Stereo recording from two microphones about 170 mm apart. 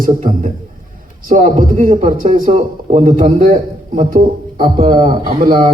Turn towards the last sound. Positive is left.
turn(degrees=-30)  # may be behind; listen again after turning